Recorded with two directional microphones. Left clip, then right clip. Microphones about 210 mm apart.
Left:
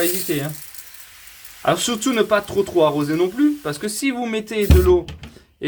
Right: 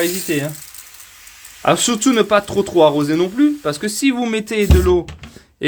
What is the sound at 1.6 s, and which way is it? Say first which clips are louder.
Speech: right 4 dB; 40° right (ahead or behind).